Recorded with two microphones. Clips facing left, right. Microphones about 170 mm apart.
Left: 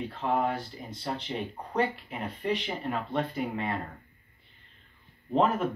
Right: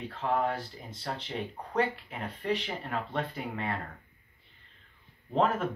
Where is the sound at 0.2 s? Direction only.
15° left (ahead or behind).